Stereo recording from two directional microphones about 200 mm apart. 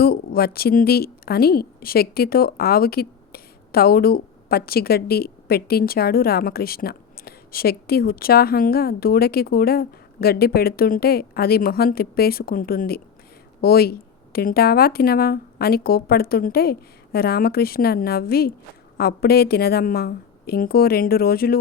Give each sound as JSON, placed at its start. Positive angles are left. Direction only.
{"t": 0.0, "sound": "a woman's voice", "side_deg": 50}